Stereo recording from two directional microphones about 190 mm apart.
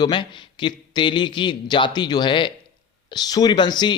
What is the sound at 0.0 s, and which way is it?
Speech, 25° left (ahead or behind).